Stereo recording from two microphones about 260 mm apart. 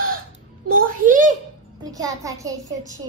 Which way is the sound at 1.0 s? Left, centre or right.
Right.